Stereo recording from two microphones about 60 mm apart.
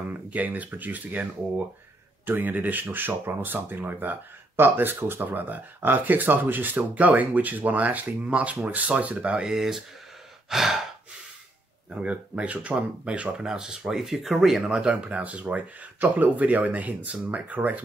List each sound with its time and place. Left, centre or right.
0.1 s speech: right
2.2 s speech: right; by 10.9 s centre
11.9 s speech: centre